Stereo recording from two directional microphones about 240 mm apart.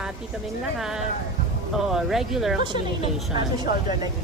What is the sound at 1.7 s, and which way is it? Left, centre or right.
Speech, centre.